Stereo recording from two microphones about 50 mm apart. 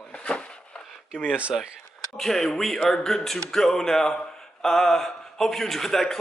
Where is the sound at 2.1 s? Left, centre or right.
Centre.